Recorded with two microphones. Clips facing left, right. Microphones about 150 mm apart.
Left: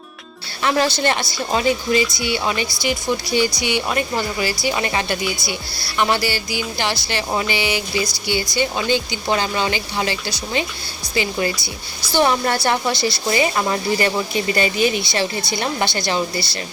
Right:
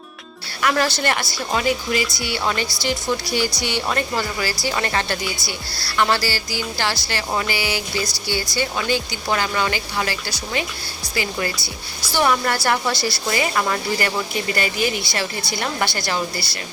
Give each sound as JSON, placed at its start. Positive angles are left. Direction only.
{"t": 0.6, "sound": "a woman's voice", "side_deg": 20}
{"t": 11.5, "sound": "a woman's voice", "side_deg": -5}
{"t": 12.1, "sound": "a woman's voice", "side_deg": 25}